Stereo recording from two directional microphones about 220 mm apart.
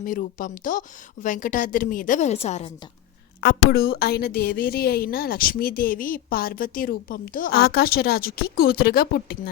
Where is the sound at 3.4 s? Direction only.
45° left (ahead or behind).